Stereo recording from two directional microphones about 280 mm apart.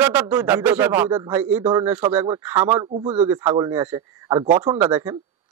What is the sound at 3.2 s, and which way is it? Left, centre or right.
Speech, centre.